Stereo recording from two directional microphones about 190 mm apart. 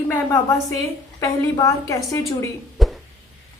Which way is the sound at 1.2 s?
15° left (ahead or behind).